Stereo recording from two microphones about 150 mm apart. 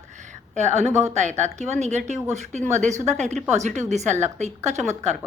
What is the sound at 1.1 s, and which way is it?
A woman's voice, 50° right (ahead or behind).